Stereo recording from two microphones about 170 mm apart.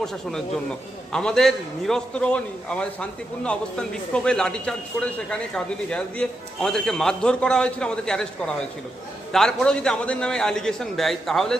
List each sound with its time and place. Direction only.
0.0 s a man's voice: 5° left (ahead or behind)